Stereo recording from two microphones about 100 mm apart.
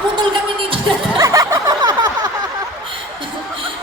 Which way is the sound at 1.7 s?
45° right (ahead or behind).